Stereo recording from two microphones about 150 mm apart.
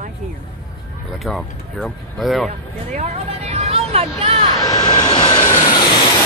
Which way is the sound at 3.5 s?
45° right (ahead or behind).